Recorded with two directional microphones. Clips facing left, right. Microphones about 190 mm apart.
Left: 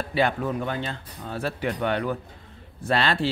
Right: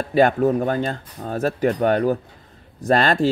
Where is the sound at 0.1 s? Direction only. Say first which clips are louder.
Right 9 dB; 45° right (ahead or behind).